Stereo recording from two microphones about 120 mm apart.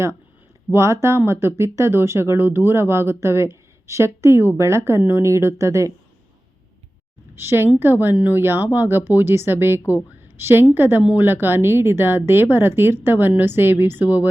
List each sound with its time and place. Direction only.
0.7 s speech: 25° right (ahead or behind)
7.3 s speech: 20° right (ahead or behind)